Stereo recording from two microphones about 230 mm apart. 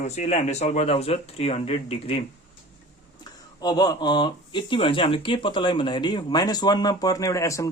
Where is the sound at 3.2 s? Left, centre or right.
Centre.